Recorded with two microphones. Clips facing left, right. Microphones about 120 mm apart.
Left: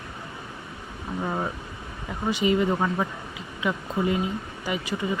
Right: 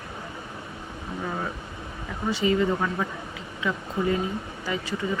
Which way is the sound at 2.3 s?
15° left (ahead or behind).